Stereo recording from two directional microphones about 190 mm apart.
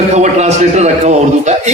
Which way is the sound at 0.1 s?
35° right (ahead or behind).